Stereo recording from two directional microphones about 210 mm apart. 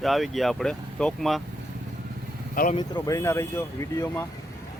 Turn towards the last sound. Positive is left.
turn(degrees=15)  # may be behind; listen again after turning